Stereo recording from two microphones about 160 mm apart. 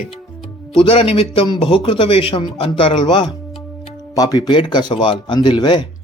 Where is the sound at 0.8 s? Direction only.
35° left (ahead or behind).